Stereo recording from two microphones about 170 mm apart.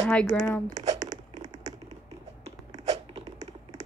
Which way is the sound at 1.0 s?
25° right (ahead or behind).